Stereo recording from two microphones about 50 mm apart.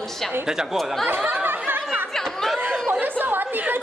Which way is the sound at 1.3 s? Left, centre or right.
Right.